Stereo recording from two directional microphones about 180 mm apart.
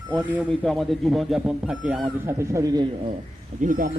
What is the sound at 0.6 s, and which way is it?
Speech, centre (ahead or behind).